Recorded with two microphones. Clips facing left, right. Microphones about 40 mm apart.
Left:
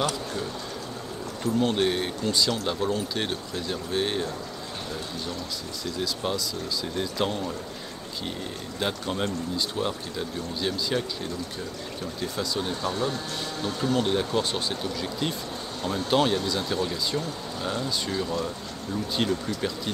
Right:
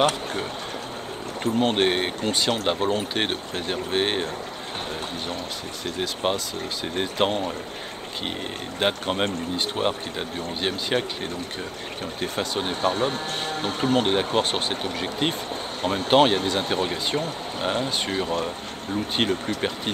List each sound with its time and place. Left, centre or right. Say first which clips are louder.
0.0 s speech: right 5 dB; right
5.9 s speech: right 4 dB; right
8.7 s speech: right 5 dB; right